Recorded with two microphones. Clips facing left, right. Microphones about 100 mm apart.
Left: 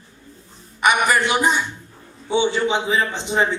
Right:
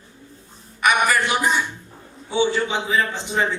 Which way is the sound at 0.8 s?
20° left (ahead or behind).